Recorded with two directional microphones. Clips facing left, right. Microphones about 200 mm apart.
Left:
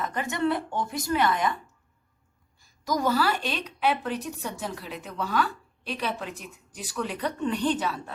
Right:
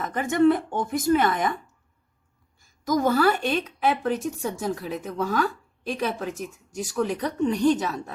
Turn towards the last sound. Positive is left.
turn(degrees=-45)  # may be behind; listen again after turning